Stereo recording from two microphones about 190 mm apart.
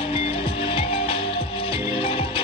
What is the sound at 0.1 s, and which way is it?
Music, 30° left (ahead or behind).